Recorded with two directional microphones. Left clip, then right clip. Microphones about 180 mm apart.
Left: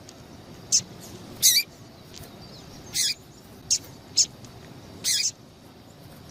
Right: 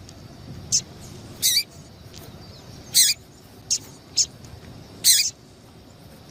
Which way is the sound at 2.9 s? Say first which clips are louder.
Right 7 dB; 20° right (ahead or behind).